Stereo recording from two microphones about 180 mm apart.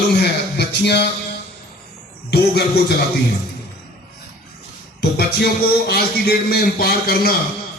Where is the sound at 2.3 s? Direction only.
65° left (ahead or behind).